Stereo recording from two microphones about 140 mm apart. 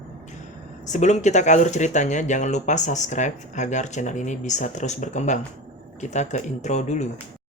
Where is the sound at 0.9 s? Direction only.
60° left (ahead or behind).